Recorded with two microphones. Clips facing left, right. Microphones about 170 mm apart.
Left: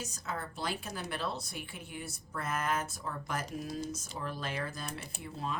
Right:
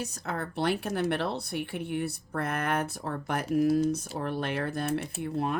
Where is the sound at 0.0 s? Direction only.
65° right (ahead or behind).